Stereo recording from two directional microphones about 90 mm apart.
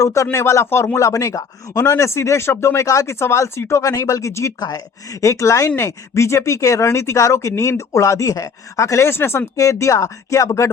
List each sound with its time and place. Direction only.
0.0 s speech: 35° left (ahead or behind)